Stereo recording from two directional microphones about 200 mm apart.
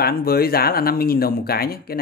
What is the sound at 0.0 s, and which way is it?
Speech, 50° left (ahead or behind).